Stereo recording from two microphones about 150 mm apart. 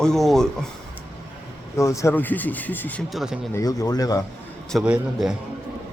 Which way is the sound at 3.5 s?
20° left (ahead or behind).